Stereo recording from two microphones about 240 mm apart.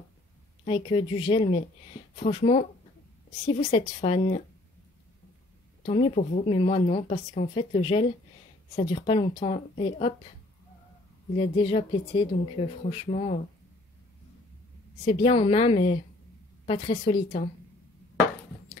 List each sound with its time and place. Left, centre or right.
0.7 s speech: left
5.9 s speech: left
11.3 s speech: left
15.0 s speech: left